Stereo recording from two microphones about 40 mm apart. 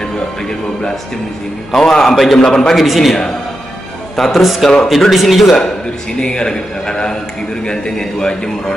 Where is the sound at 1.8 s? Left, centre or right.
Centre.